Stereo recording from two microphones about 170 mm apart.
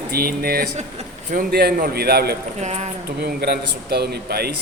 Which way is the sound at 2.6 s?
40° right (ahead or behind).